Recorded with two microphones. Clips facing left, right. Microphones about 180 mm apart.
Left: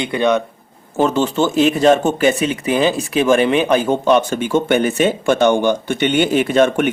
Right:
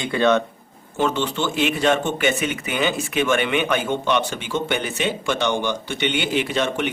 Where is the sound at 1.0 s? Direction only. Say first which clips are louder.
Left 7 dB; 40° left (ahead or behind).